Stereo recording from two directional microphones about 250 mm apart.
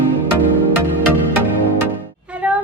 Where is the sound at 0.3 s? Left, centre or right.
Right.